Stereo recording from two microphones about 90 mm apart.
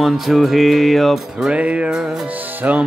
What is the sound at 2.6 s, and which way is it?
Speech, 15° right (ahead or behind).